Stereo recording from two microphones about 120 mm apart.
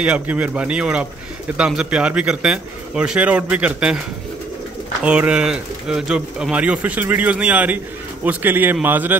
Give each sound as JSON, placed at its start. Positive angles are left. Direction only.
{"t": 0.0, "sound": "speech", "side_deg": -10}
{"t": 5.0, "sound": "speech", "side_deg": -10}